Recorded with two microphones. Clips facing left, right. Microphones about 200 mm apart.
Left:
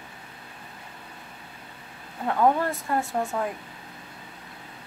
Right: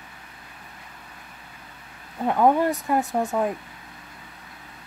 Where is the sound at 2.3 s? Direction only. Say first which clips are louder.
Right 3 dB; 20° right (ahead or behind).